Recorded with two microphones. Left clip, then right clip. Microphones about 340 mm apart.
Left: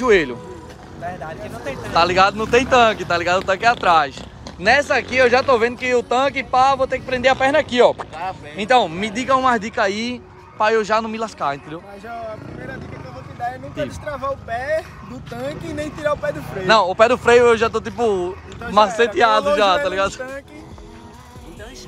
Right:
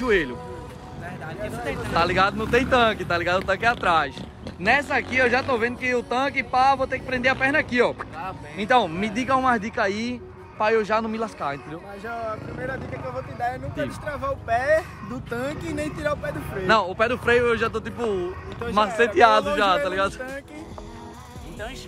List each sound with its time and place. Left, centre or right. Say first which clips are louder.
0.0 s speech: left 7 dB; centre
13.4 s speech: left 3 dB; centre